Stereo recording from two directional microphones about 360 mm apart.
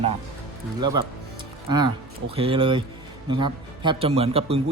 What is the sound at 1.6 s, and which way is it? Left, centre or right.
A man's voice, centre.